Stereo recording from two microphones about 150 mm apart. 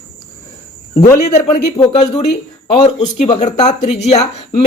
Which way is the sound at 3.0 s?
50° left (ahead or behind).